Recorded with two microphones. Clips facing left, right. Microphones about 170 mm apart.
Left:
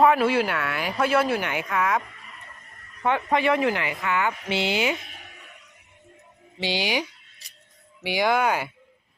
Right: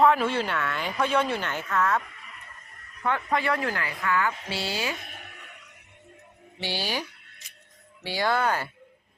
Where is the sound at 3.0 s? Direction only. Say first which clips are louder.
Left 4 dB; 20° left (ahead or behind).